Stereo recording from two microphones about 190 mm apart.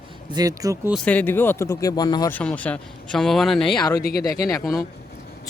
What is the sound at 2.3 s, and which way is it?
Speech, 5° left (ahead or behind).